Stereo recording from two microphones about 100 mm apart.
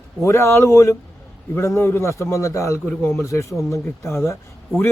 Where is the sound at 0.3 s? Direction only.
25° left (ahead or behind).